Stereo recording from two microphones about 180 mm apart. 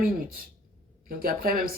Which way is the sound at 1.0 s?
55° right (ahead or behind).